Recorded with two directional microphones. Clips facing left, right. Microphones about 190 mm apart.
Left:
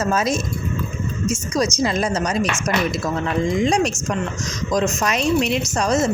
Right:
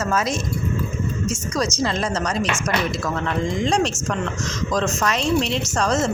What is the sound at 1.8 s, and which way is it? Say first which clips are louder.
Speech: left 2 dB; 20° left (ahead or behind).